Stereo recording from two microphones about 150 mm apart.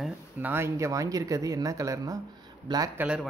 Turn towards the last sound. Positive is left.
turn(degrees=-5)  # may be behind; listen again after turning